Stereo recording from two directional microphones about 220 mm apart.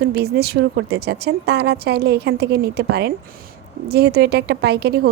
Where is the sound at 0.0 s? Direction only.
45° right (ahead or behind).